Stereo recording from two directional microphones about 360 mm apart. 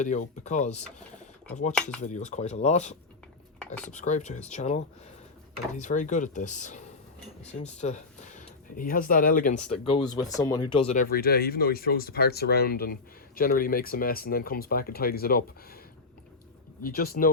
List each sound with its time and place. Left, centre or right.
0.0 s speech: centre
3.9 s speech: centre
16.8 s speech: left